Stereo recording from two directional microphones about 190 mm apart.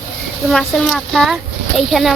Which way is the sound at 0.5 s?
5° left (ahead or behind).